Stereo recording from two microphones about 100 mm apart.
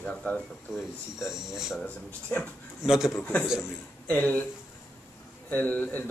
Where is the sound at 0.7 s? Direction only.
5° right (ahead or behind).